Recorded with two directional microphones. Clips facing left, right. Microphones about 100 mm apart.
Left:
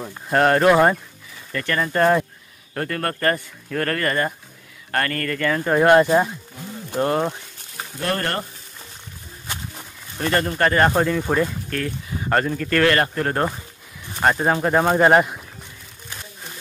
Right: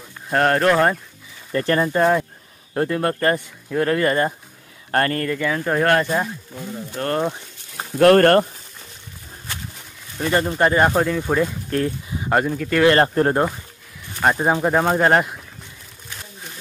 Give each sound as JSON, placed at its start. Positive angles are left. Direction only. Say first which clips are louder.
{"t": 0.3, "sound": "speech", "louder": "left 1 dB", "side_deg": 0}
{"t": 1.5, "sound": "speech", "louder": "right 5 dB", "side_deg": -30}
{"t": 1.9, "sound": "speech", "louder": "left 3 dB", "side_deg": -10}
{"t": 2.7, "sound": "speech", "louder": "right 5 dB", "side_deg": -20}
{"t": 5.3, "sound": "speech", "louder": "left 1 dB", "side_deg": -5}
{"t": 5.8, "sound": "speech", "louder": "left 5 dB", "side_deg": 20}
{"t": 7.1, "sound": "speech", "louder": "right 1 dB", "side_deg": 5}
{"t": 8.0, "sound": "speech", "louder": "right 13 dB", "side_deg": -55}
{"t": 10.1, "sound": "speech", "louder": "right 1 dB", "side_deg": -10}
{"t": 10.9, "sound": "speech", "louder": "even", "side_deg": 0}
{"t": 12.8, "sound": "speech", "louder": "right 5 dB", "side_deg": -30}
{"t": 14.2, "sound": "speech", "louder": "right 1 dB", "side_deg": -5}
{"t": 14.8, "sound": "speech", "louder": "left 4 dB", "side_deg": 0}